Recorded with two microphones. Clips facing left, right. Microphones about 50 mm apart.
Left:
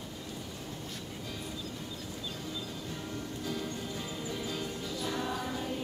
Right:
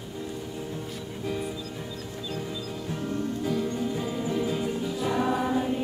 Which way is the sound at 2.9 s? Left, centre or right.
Right.